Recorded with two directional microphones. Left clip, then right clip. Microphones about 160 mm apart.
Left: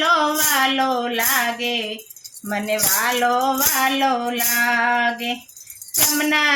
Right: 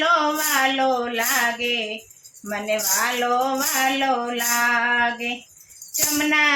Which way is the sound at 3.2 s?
30° left (ahead or behind).